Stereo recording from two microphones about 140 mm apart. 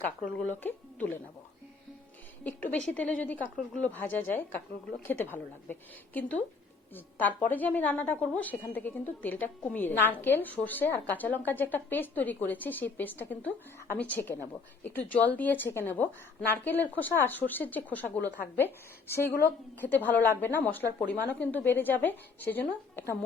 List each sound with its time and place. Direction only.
0.0 s a woman's voice: 10° left (ahead or behind)
2.4 s a woman's voice: 15° left (ahead or behind)